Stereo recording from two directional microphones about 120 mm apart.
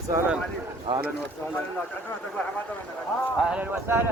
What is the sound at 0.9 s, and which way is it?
Speech, 45° right (ahead or behind).